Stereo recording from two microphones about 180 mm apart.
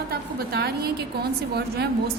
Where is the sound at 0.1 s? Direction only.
60° right (ahead or behind).